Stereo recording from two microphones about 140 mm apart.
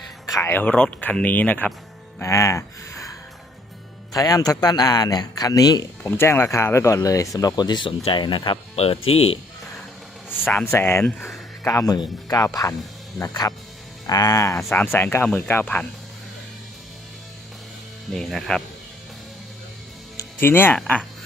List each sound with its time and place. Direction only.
0.3 s speech: 20° left (ahead or behind)
6.0 s speech: 15° left (ahead or behind); by 9.4 s 45° left (ahead or behind)
10.2 s speech: 10° left (ahead or behind)
18.1 s speech: centre (ahead or behind)
20.1 s music: 15° left (ahead or behind)
20.7 s speech: 10° left (ahead or behind)